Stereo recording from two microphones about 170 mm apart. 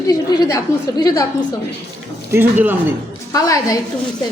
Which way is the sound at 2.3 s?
10° right (ahead or behind).